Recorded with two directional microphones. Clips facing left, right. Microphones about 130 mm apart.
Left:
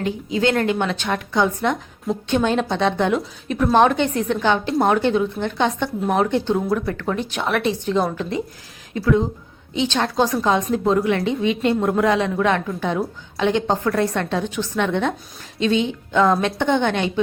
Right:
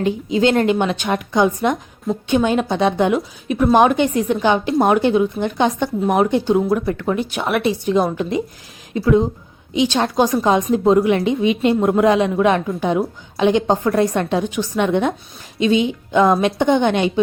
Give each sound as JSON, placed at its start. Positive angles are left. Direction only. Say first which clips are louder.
{"t": 0.0, "sound": "a woman's voice", "louder": "right 4 dB", "side_deg": -20}
{"t": 6.7, "sound": "speech", "louder": "right 3 dB", "side_deg": -25}
{"t": 7.1, "sound": "a woman's voice", "louder": "right 2 dB", "side_deg": -5}